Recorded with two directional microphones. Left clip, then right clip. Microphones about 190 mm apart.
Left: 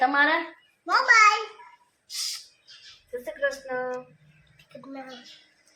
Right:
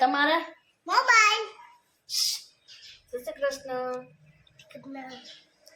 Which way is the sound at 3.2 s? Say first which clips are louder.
Left 2 dB; centre (ahead or behind).